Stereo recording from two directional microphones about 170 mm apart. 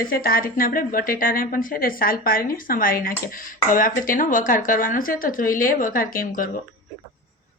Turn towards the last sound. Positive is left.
turn(degrees=55)  # may be behind; listen again after turning